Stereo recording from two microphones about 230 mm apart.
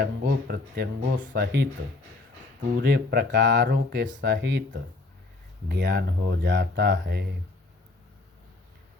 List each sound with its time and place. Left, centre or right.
0.0 s speech: right
2.8 s speech: right